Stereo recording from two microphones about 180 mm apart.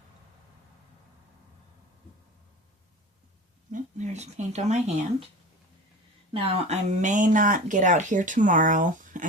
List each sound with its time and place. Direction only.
3.7 s speech: 40° right (ahead or behind)
6.3 s speech: 35° right (ahead or behind)